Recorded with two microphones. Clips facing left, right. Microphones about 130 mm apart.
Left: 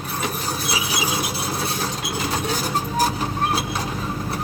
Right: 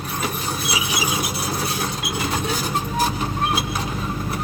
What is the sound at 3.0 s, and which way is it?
Printer, 35° left (ahead or behind).